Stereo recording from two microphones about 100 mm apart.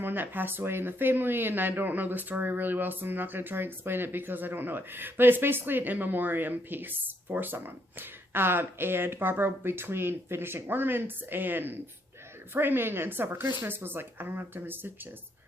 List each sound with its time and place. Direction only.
0.0 s speech: 20° right (ahead or behind)